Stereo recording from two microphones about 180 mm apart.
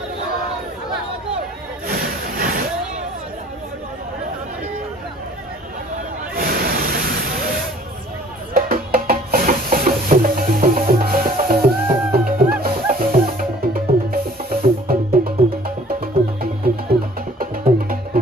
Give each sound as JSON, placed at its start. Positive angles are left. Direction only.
{"t": 1.9, "sound": "music", "side_deg": -50}
{"t": 6.3, "sound": "a sound", "side_deg": -55}
{"t": 8.5, "sound": "music", "side_deg": -55}